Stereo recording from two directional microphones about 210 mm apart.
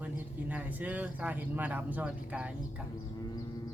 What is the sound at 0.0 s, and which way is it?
Speech, 10° right (ahead or behind).